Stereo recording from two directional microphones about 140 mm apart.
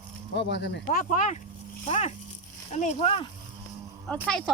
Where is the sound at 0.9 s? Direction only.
75° left (ahead or behind); by 3.1 s 60° left (ahead or behind).